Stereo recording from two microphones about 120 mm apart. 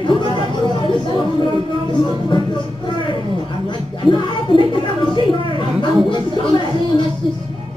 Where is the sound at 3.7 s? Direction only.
40° left (ahead or behind).